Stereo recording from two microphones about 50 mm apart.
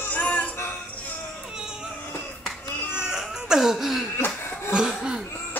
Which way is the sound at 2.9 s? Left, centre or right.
Centre.